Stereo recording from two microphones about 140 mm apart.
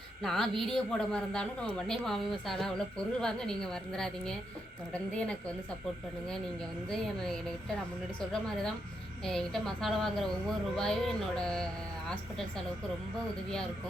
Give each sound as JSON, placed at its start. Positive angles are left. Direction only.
{"t": 0.2, "sound": "a woman's voice", "side_deg": 0}
{"t": 6.9, "sound": "speech", "side_deg": 5}